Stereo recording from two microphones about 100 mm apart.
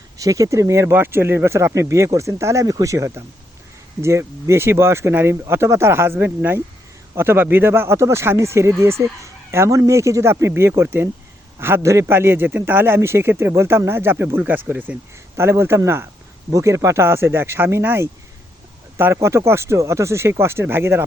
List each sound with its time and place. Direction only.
0.2 s speech: 35° right (ahead or behind)